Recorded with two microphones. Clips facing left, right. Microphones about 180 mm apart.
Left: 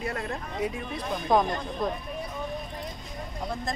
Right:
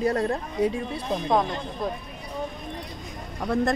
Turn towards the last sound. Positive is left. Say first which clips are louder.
# right 9 dB
turn(degrees=-65)  # may be behind; listen again after turning